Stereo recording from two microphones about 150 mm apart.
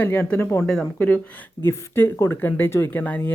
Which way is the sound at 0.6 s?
5° left (ahead or behind).